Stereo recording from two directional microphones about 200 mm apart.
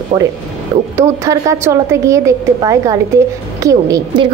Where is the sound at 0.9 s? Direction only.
15° right (ahead or behind).